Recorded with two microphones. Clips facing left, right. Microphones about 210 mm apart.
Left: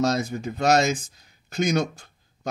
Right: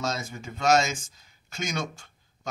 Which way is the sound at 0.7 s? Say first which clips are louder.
Left 2 dB; 60° left (ahead or behind).